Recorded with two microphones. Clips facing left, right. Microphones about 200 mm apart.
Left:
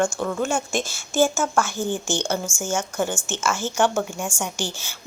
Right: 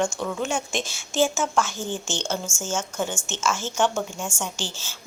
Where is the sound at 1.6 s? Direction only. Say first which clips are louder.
Left 4 dB; 10° left (ahead or behind).